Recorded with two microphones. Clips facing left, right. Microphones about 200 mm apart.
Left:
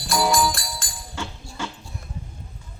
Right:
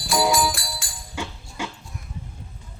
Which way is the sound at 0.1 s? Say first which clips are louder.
Even; 5° right (ahead or behind).